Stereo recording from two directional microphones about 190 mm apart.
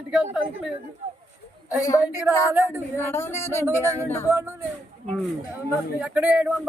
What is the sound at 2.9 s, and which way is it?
Speech, 10° left (ahead or behind).